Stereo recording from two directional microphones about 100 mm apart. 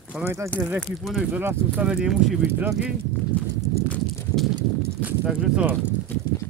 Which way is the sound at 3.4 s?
10° left (ahead or behind).